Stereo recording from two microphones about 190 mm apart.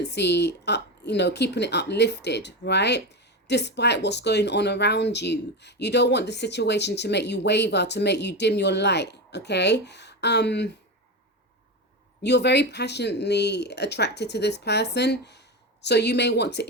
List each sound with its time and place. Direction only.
0.0 s speech: 65° left (ahead or behind)
12.2 s speech: 65° left (ahead or behind)